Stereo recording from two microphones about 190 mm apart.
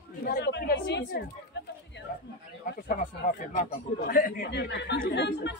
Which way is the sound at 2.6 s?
45° left (ahead or behind).